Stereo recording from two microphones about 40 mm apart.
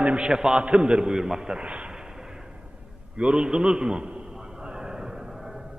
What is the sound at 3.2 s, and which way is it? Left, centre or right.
Speech, right.